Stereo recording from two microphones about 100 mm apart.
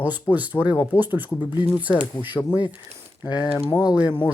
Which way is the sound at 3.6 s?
45° left (ahead or behind).